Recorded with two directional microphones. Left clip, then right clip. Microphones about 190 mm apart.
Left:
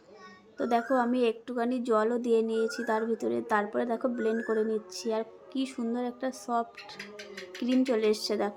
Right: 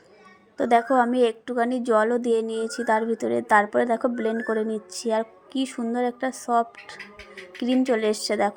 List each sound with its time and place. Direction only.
0.5 s a woman's voice: 25° right (ahead or behind)